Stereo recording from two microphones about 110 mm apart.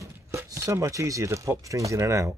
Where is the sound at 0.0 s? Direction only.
25° right (ahead or behind).